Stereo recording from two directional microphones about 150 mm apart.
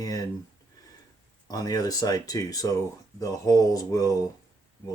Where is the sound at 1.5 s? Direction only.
25° left (ahead or behind).